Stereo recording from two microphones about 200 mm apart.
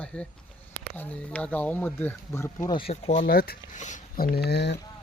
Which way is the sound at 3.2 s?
50° left (ahead or behind).